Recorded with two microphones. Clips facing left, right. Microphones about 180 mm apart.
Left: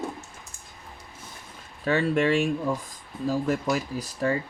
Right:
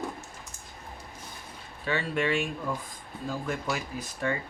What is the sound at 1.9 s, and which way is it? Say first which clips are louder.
Speech: left 6 dB; 45° left (ahead or behind).